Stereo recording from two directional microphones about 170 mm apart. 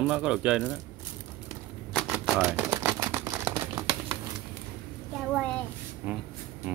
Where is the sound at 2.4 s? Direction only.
15° right (ahead or behind).